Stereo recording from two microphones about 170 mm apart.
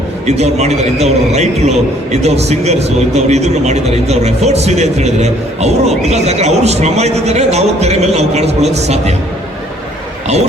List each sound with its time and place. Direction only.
0.3 s a man's voice: 40° right (ahead or behind)